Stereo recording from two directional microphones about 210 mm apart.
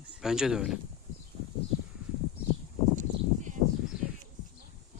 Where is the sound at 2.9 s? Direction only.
35° right (ahead or behind).